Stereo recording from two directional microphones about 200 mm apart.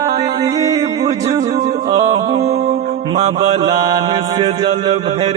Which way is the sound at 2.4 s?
30° right (ahead or behind).